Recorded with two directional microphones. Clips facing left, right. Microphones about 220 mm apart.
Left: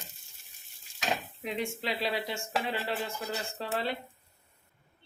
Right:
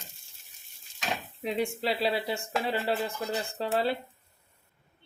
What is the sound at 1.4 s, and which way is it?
Speech, 35° right (ahead or behind).